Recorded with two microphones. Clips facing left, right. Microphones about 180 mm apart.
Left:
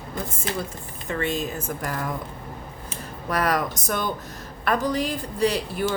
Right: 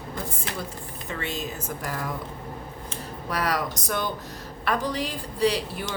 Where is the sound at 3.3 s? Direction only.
50° left (ahead or behind).